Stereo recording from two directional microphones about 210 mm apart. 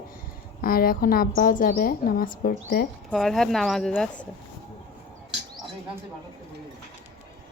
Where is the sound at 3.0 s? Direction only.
Centre (ahead or behind).